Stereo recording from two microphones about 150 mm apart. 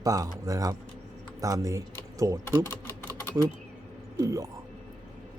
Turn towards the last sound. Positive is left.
turn(degrees=-20)  # may be behind; listen again after turning